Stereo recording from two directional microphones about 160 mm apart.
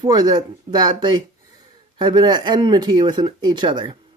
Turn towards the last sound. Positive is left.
turn(degrees=-30)  # may be behind; listen again after turning